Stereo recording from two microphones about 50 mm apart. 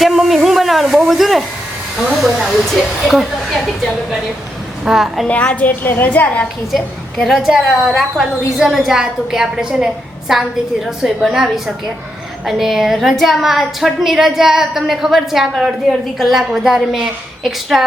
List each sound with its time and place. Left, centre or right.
0.0 s speech: centre
4.9 s a woman's voice: centre
5.3 s a woman's voice: left
7.3 s a woman's voice: centre